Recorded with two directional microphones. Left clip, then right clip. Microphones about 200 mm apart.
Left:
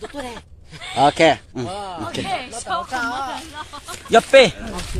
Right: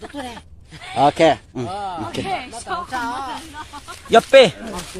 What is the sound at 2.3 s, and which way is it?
Speech, 55° left (ahead or behind).